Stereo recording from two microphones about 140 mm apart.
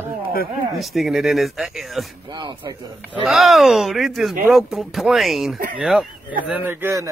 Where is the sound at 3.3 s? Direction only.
Centre (ahead or behind).